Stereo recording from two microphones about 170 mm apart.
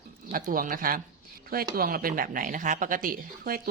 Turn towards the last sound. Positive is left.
turn(degrees=-60)  # may be behind; listen again after turning